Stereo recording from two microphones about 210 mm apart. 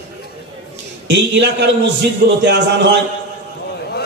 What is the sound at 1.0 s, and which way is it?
A man's voice, 55° right (ahead or behind).